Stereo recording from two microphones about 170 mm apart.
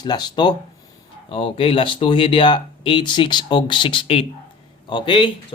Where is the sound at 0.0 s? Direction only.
25° left (ahead or behind).